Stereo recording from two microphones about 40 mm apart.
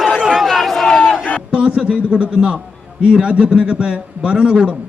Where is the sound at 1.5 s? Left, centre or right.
Right.